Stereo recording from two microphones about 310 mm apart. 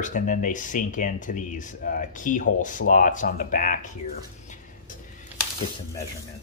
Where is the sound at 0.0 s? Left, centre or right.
Left.